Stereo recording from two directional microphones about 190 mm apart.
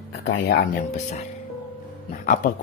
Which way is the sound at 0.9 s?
40° left (ahead or behind).